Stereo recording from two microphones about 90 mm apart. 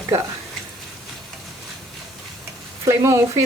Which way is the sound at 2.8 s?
35° right (ahead or behind).